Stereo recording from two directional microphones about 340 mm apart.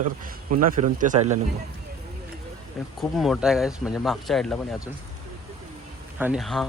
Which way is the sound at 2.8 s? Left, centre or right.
Centre.